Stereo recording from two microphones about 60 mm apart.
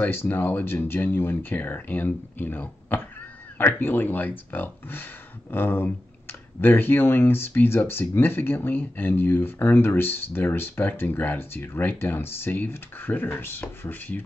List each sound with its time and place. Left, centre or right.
0.0 s speech: left